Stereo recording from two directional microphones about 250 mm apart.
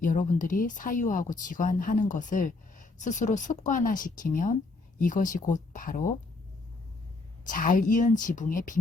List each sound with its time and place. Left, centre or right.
0.0 s speech: left
7.4 s speech: left